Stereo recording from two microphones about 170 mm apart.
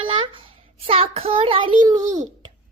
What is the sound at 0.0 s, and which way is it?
A child's voice, 30° right (ahead or behind).